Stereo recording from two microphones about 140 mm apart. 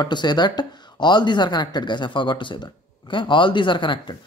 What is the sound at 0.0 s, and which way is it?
Speech, 30° left (ahead or behind).